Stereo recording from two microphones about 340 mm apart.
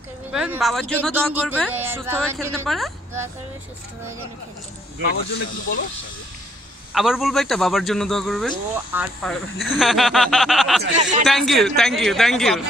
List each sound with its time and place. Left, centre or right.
0.3 s a man's voice: centre
6.9 s a man's voice: centre
10.8 s speech: right
11.2 s a man's voice: centre